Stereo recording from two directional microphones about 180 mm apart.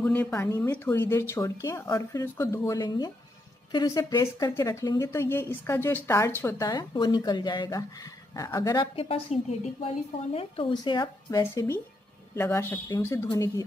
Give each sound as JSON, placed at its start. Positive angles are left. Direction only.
{"t": 0.0, "sound": "speech", "side_deg": 10}